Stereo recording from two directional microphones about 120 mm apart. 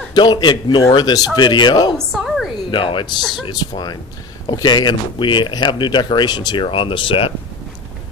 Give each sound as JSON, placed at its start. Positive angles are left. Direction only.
{"t": 0.1, "sound": "speech", "side_deg": 35}
{"t": 2.1, "sound": "a sound", "side_deg": 0}
{"t": 2.7, "sound": "speech", "side_deg": 45}
{"t": 3.2, "sound": "speech", "side_deg": 0}
{"t": 3.4, "sound": "speech", "side_deg": 35}